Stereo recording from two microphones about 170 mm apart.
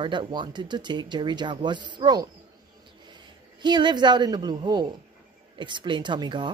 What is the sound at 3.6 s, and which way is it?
A woman's voice, 25° right (ahead or behind).